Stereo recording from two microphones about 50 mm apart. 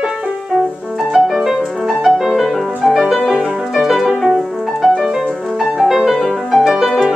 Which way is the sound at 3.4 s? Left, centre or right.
Centre.